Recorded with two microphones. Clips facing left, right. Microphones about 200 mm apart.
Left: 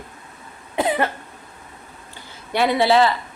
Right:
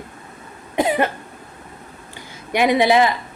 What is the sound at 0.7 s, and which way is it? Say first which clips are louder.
Cough: right 2 dB; 15° right (ahead or behind).